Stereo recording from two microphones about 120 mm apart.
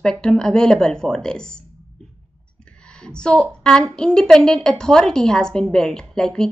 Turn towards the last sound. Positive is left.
turn(degrees=5)  # may be behind; listen again after turning